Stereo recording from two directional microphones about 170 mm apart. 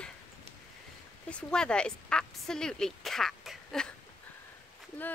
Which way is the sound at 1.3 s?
5° left (ahead or behind).